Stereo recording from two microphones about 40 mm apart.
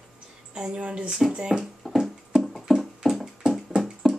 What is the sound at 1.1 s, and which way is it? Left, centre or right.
Speech, centre.